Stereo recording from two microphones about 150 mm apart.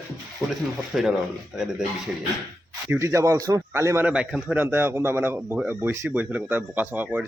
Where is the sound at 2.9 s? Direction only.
20° right (ahead or behind).